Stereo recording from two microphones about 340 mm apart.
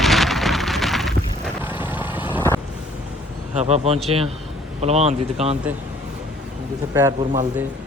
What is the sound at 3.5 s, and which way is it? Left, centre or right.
A man's voice, centre.